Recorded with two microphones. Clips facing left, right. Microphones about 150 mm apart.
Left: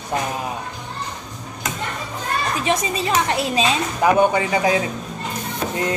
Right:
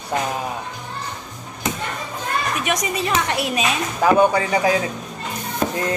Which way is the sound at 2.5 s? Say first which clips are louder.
Left 1 dB; 30° left (ahead or behind).